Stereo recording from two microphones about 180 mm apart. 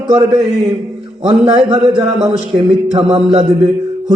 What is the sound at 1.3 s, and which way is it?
A man's voice, 35° right (ahead or behind).